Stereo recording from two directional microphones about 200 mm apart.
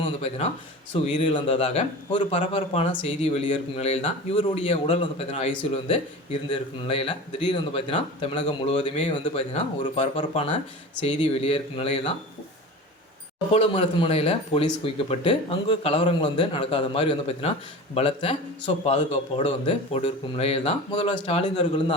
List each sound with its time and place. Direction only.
0.0 s speech: 30° left (ahead or behind)
13.5 s speech: 30° left (ahead or behind)